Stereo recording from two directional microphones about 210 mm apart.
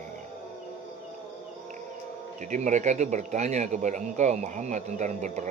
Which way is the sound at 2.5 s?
35° right (ahead or behind).